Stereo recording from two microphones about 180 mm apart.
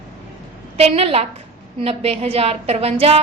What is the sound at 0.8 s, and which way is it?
A woman's voice, 35° right (ahead or behind).